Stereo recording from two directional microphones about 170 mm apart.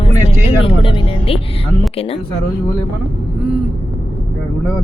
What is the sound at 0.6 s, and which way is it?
Speech, 30° left (ahead or behind).